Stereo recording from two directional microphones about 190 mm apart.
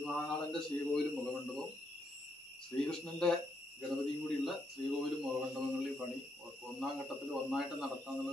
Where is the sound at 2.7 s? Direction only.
5° left (ahead or behind).